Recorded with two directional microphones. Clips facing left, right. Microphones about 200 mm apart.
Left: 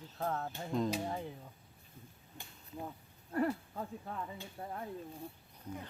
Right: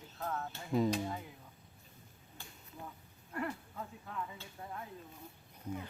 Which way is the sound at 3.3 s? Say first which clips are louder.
Left 6 dB; 35° left (ahead or behind).